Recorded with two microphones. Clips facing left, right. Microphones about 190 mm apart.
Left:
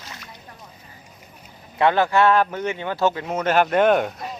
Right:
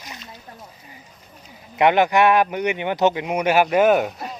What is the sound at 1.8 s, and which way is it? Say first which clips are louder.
Speech: right 2 dB; 15° right (ahead or behind).